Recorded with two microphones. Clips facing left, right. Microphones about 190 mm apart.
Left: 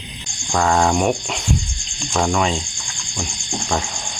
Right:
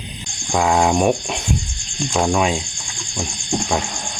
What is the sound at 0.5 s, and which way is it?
Speech, 10° right (ahead or behind).